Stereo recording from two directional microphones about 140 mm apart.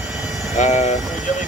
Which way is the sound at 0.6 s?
55° left (ahead or behind).